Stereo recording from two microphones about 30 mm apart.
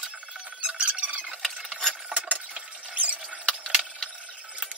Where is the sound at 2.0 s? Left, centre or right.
Right.